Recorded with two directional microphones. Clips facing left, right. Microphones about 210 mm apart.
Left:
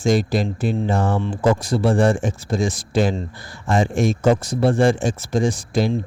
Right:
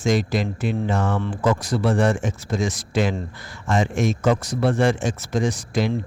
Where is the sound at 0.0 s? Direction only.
30° left (ahead or behind).